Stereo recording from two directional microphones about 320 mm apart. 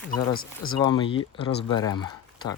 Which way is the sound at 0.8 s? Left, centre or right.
Centre.